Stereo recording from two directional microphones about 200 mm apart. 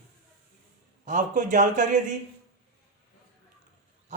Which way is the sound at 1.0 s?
40° right (ahead or behind).